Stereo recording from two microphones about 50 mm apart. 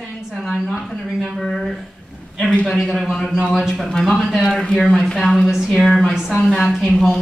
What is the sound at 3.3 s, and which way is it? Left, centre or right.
Speech, centre.